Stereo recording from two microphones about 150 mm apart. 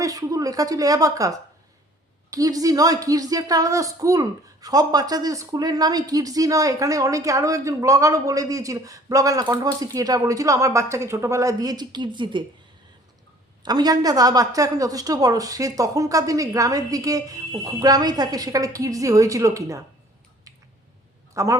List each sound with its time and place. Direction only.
0.0 s a woman's voice: 25° right (ahead or behind)
13.6 s a woman's voice: 25° right (ahead or behind)
21.3 s a woman's voice: 20° right (ahead or behind)